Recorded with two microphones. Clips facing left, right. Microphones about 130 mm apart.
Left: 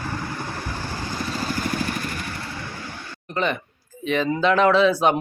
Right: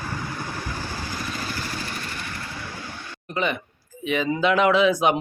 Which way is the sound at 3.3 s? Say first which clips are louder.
Left 1 dB; 10° right (ahead or behind).